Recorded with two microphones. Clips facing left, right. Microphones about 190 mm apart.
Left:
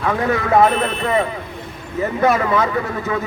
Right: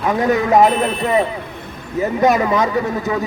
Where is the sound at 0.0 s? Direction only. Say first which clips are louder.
Right 3 dB; 20° right (ahead or behind).